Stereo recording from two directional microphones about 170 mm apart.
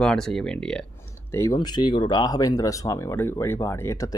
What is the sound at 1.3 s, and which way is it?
Speech, 15° left (ahead or behind).